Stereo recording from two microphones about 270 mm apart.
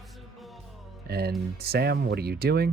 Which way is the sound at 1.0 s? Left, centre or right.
Right.